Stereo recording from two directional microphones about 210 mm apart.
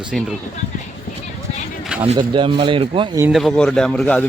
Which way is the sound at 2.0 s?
25° right (ahead or behind).